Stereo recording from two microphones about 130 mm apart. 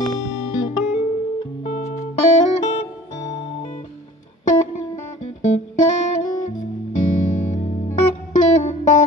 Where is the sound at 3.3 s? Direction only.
50° left (ahead or behind).